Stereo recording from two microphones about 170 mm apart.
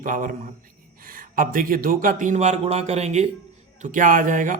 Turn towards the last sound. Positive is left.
turn(degrees=-50)  # may be behind; listen again after turning